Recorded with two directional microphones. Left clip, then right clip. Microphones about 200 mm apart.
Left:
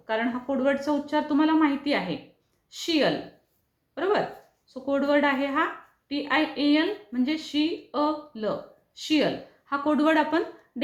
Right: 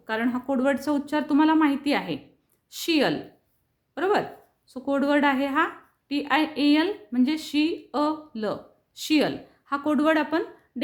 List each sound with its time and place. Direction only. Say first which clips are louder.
0.0 s a woman's voice: even; 40° right (ahead or behind); by 10.4 s 20° right (ahead or behind)